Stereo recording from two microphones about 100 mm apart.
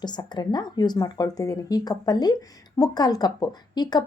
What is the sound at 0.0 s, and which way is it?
Speech, 45° left (ahead or behind).